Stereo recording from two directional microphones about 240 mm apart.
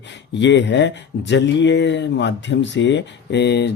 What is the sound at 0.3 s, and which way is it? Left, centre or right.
Speech, left.